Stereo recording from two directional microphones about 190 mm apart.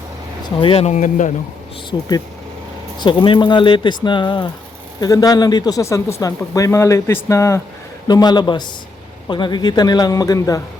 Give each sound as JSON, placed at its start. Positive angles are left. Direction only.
{"t": 0.6, "sound": "speech", "side_deg": 30}
{"t": 1.9, "sound": "speech", "side_deg": 20}